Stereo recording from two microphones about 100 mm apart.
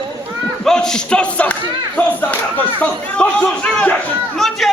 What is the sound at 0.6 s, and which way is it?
Speech, 5° left (ahead or behind).